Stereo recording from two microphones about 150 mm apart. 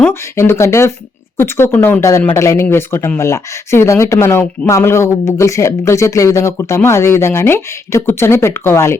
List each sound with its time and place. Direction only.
0.0 s speech: 15° left (ahead or behind)